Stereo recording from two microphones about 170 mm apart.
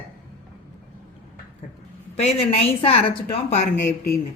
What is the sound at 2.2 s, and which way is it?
A woman's voice, 40° left (ahead or behind).